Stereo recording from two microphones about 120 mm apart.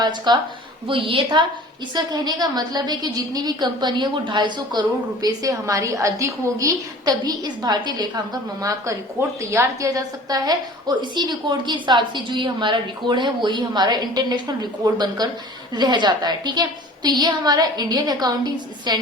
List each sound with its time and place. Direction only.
0.0 s a woman's voice: 35° right (ahead or behind)
0.9 s a woman's voice: 45° right (ahead or behind)
2.0 s a woman's voice: 35° right (ahead or behind)